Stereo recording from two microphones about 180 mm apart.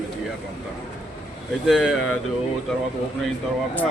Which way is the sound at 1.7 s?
Centre (ahead or behind).